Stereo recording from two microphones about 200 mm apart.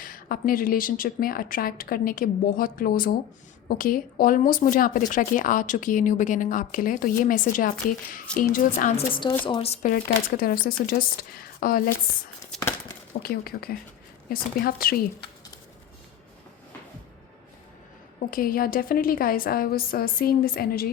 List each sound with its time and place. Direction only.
0.0 s speech: 45° left (ahead or behind)
9.0 s a woman's voice: 25° left (ahead or behind); by 11.8 s 45° left (ahead or behind)
12.5 s a sound: centre (ahead or behind)
13.2 s speech: 50° left (ahead or behind)
18.3 s speech: 45° left (ahead or behind)